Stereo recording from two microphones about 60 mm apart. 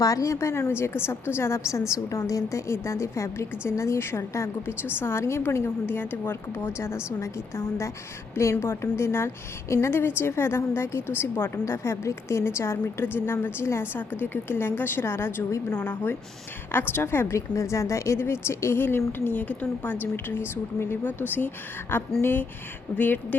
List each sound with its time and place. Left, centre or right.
0.0 s a woman's voice: left
1.9 s a woman's voice: left